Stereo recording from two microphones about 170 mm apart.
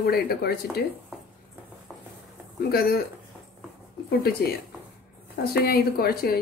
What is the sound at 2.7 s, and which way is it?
Speech, 65° left (ahead or behind).